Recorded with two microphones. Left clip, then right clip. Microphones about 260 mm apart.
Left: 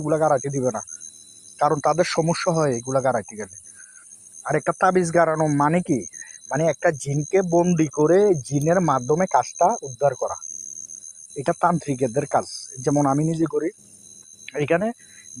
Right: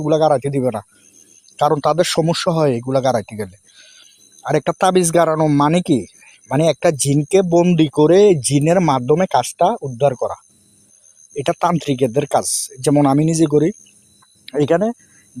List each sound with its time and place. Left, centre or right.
0.0 s speech: right
8.4 s speech: right